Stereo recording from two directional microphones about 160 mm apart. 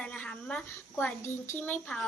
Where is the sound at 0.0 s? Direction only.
5° left (ahead or behind).